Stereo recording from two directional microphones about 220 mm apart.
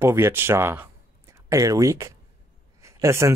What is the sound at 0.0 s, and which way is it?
Speech, 10° right (ahead or behind).